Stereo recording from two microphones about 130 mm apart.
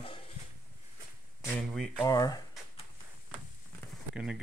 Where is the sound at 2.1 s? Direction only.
30° left (ahead or behind).